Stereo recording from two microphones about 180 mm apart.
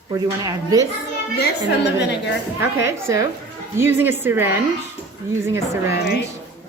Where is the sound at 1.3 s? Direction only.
65° left (ahead or behind).